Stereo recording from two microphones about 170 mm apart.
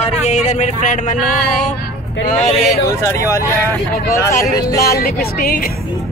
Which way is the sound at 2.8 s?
15° left (ahead or behind).